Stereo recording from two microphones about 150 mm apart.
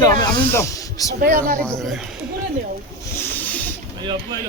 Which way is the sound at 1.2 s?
70° right (ahead or behind).